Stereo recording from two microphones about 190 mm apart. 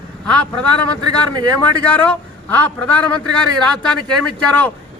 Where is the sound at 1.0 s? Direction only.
20° right (ahead or behind).